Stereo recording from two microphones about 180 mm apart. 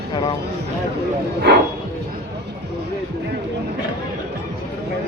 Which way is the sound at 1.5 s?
70° right (ahead or behind).